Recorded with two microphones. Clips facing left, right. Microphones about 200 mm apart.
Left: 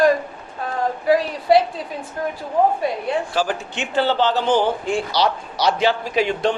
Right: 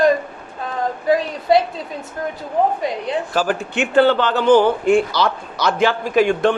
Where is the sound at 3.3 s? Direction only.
55° right (ahead or behind).